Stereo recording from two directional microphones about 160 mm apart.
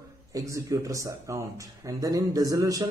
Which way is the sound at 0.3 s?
20° right (ahead or behind).